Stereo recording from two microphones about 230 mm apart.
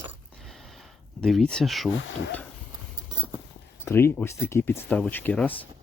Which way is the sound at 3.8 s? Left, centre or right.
Centre.